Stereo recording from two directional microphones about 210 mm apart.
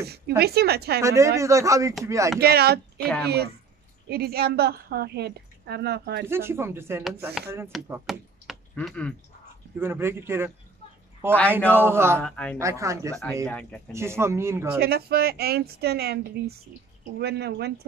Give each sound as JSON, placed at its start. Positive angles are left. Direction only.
{"t": 0.4, "sound": "a woman's voice", "side_deg": -50}
{"t": 1.0, "sound": "speech", "side_deg": -15}
{"t": 2.4, "sound": "a woman's voice", "side_deg": -50}
{"t": 3.0, "sound": "a woman's voice", "side_deg": 5}
{"t": 4.1, "sound": "a woman's voice", "side_deg": -50}
{"t": 6.2, "sound": "speech", "side_deg": -10}
{"t": 7.9, "sound": "speech", "side_deg": 0}
{"t": 9.8, "sound": "speech", "side_deg": -10}
{"t": 11.7, "sound": "speech", "side_deg": -10}
{"t": 12.2, "sound": "speech", "side_deg": 5}
{"t": 12.5, "sound": "speech", "side_deg": -15}
{"t": 13.1, "sound": "speech", "side_deg": 0}
{"t": 13.9, "sound": "speech", "side_deg": -10}
{"t": 14.8, "sound": "a woman's voice", "side_deg": -50}